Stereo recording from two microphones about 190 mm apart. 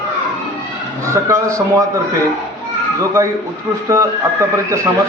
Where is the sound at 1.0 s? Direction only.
15° right (ahead or behind).